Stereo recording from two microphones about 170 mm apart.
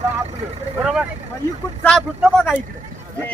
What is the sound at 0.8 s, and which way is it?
A man's voice, 5° right (ahead or behind).